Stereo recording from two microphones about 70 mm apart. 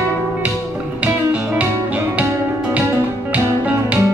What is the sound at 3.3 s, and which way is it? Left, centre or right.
Music, right.